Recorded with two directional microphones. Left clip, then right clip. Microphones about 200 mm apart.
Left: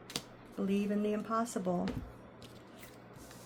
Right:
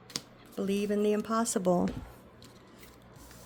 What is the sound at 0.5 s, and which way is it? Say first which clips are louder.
Speech: right 5 dB; 50° right (ahead or behind).